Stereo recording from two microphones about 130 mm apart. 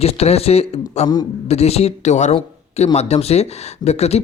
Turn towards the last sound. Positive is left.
turn(degrees=55)  # may be behind; listen again after turning